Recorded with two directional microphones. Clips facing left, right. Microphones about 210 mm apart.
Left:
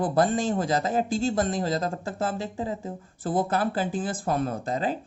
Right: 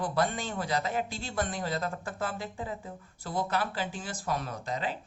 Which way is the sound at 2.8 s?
50° left (ahead or behind).